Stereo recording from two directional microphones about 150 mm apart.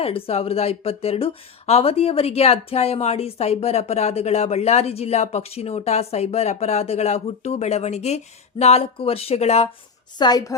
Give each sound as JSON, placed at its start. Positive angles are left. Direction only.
{"t": 0.0, "sound": "speech", "side_deg": 40}
{"t": 10.2, "sound": "a woman's voice", "side_deg": 25}